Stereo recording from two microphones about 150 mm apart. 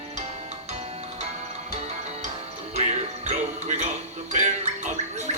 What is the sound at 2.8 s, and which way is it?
Jingle bell, 45° right (ahead or behind).